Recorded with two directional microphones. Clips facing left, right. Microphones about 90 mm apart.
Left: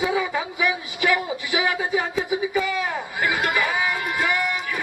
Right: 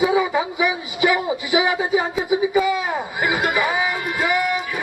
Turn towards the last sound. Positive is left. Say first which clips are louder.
# right 4 dB
turn(degrees=-10)  # may be behind; listen again after turning